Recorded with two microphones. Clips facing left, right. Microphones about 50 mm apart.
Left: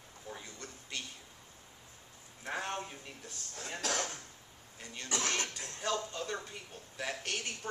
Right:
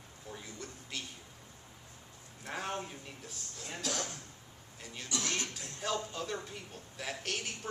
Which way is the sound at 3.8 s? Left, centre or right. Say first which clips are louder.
Left 2 dB; left.